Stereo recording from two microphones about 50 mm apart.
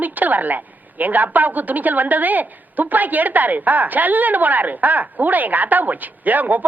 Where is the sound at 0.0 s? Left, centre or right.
Right.